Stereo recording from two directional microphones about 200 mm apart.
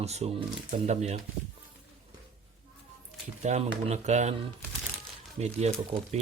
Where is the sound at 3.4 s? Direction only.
30° right (ahead or behind).